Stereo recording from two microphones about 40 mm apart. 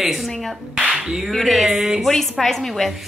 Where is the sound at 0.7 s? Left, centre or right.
Right.